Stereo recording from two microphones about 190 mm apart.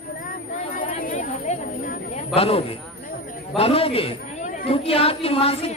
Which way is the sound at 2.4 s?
30° left (ahead or behind).